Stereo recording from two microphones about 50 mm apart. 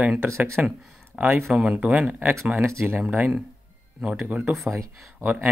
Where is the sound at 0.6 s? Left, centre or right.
Right.